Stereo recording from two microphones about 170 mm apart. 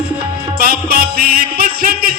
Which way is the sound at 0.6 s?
60° right (ahead or behind).